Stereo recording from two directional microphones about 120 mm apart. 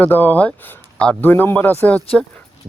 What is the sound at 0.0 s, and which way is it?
Speech, 15° left (ahead or behind).